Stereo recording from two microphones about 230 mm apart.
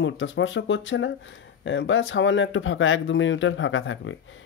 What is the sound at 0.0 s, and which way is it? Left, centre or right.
Speech, left.